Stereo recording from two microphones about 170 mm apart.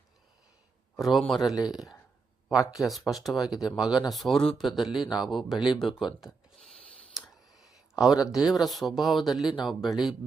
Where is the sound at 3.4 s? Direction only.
25° left (ahead or behind).